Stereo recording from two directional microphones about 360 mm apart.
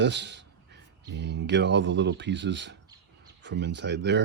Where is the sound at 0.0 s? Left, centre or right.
Right.